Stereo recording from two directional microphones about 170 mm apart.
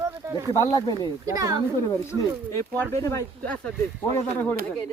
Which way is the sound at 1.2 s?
20° right (ahead or behind).